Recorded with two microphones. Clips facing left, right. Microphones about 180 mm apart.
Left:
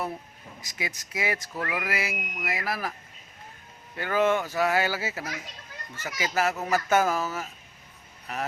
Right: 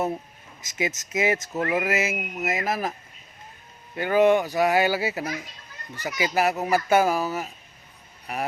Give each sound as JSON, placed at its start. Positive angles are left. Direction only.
{"t": 0.6, "sound": "speech", "side_deg": -20}
{"t": 3.9, "sound": "speech", "side_deg": -15}